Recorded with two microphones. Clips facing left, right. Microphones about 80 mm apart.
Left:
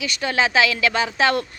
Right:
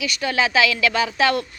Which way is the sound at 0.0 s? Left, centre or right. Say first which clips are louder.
Even; left.